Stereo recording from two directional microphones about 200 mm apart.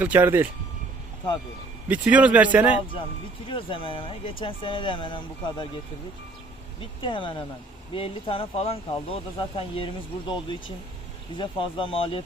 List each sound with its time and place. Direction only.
0.0 s speech: 10° right (ahead or behind)
1.9 s speech: 5° right (ahead or behind)
3.4 s speech: 25° left (ahead or behind)
7.0 s speech: 25° left (ahead or behind)